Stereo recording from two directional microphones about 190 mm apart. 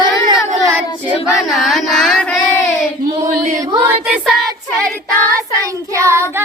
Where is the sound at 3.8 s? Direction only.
10° right (ahead or behind).